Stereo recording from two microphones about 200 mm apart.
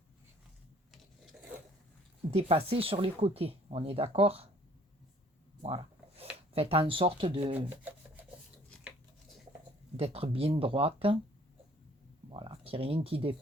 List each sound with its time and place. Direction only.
0.9 s filing: centre (ahead or behind)
2.3 s speech: 30° right (ahead or behind)
5.6 s a sound: 30° right (ahead or behind)
6.5 s speech: 30° right (ahead or behind)
7.7 s rub: 10° right (ahead or behind)
10.0 s speech: 30° right (ahead or behind)
12.3 s speech: 25° right (ahead or behind)